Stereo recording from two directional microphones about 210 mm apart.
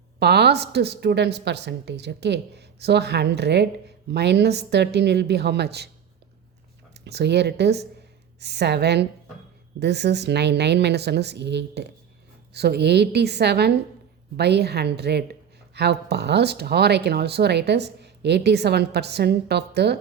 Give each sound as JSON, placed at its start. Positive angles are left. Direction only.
{"t": 0.2, "sound": "a woman's voice", "side_deg": -50}
{"t": 7.0, "sound": "a woman's voice", "side_deg": -55}